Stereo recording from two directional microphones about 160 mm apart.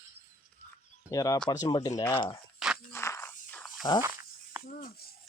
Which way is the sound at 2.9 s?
15° left (ahead or behind).